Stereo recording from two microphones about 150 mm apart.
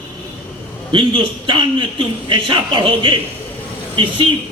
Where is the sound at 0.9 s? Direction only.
35° right (ahead or behind).